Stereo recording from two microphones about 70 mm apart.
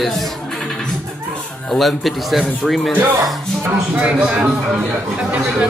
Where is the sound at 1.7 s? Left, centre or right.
Centre.